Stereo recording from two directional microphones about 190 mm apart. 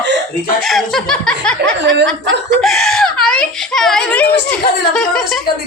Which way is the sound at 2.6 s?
Centre (ahead or behind).